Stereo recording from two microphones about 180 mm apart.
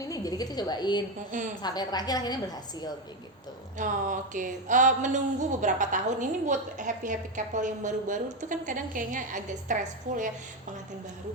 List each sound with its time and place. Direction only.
0.0 s a woman's voice: 20° left (ahead or behind)
3.8 s speech: 45° right (ahead or behind)